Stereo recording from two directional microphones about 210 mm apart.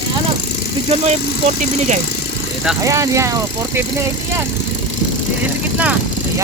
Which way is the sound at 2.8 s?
15° right (ahead or behind).